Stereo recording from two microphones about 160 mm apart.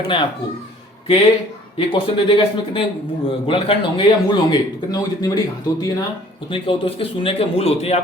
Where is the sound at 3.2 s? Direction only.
35° left (ahead or behind).